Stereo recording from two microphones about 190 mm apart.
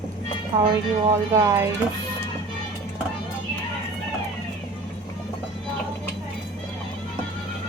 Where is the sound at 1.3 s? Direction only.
15° right (ahead or behind).